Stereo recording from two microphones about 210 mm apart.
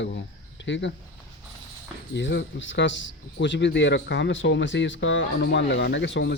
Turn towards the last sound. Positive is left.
turn(degrees=55)  # may be behind; listen again after turning